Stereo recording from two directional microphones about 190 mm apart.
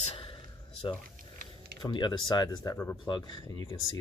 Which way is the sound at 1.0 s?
50° right (ahead or behind).